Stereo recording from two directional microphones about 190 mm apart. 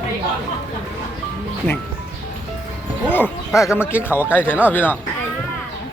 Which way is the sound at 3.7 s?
10° left (ahead or behind).